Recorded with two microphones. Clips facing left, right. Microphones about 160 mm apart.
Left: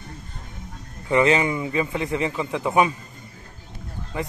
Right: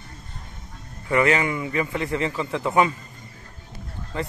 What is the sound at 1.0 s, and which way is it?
A man's voice, 20° left (ahead or behind).